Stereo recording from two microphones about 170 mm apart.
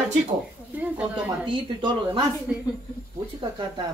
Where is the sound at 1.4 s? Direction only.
30° right (ahead or behind).